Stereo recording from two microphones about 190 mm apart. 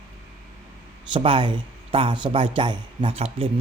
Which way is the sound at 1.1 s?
25° right (ahead or behind).